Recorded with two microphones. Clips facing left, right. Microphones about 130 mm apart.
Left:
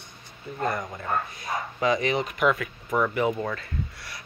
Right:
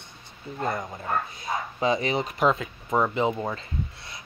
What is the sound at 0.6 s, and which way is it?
A man's voice, 25° right (ahead or behind).